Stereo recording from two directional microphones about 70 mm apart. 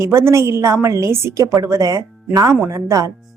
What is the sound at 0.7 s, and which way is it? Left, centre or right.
Speech, right.